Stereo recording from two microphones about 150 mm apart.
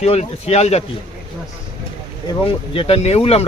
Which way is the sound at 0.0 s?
45° left (ahead or behind).